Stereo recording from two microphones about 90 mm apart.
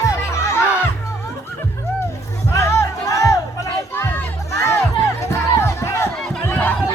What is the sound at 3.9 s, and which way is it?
Music, 20° left (ahead or behind).